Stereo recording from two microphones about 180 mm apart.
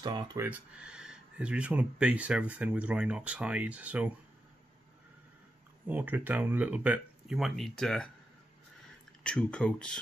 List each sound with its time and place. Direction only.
0.0 s speech: 20° right (ahead or behind)
0.5 s speech: 5° right (ahead or behind)
5.9 s speech: 10° right (ahead or behind)
9.2 s speech: 5° left (ahead or behind)